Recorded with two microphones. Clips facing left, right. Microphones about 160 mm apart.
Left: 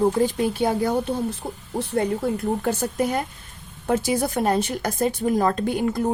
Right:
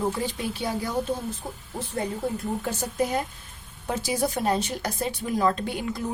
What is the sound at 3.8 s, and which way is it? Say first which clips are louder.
Speech: left 5 dB; 55° left (ahead or behind).